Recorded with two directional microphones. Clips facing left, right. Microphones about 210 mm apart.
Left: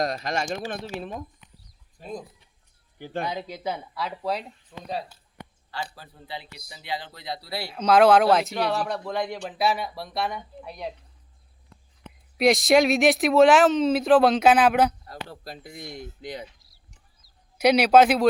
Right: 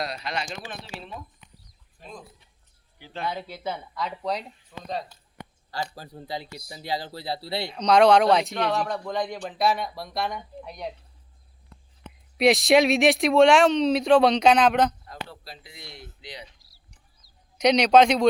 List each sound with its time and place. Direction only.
0.0 s speech: 45° left (ahead or behind)
3.0 s speech: 50° left (ahead or behind)
3.2 s speech: 15° left (ahead or behind)
5.7 s speech: 40° right (ahead or behind)
7.7 s speech: 5° left (ahead or behind)
12.4 s speech: centre (ahead or behind)
15.0 s speech: 40° left (ahead or behind)
17.6 s speech: 5° left (ahead or behind)